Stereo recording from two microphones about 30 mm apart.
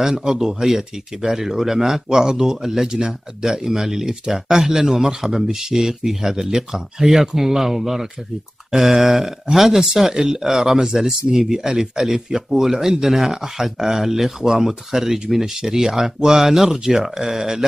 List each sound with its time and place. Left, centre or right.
0.0 s speech: right